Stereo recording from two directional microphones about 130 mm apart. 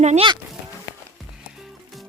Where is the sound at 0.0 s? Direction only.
60° right (ahead or behind).